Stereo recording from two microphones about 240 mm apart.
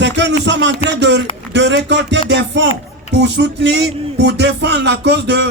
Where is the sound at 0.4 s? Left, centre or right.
Right.